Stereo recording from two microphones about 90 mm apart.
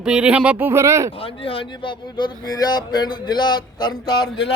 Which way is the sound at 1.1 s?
90° left.